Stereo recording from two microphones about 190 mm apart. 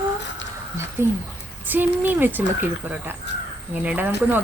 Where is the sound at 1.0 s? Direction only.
10° right (ahead or behind).